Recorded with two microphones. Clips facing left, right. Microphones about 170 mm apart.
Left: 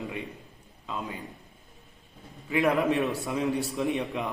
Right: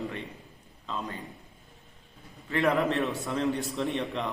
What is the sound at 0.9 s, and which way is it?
Speech, 10° left (ahead or behind).